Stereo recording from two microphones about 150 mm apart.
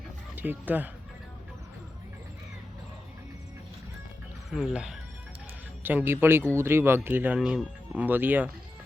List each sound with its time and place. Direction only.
0.3 s speech: 10° right (ahead or behind)
4.4 s speech: centre (ahead or behind)